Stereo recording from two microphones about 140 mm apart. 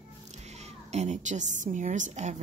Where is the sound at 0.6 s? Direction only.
50° right (ahead or behind).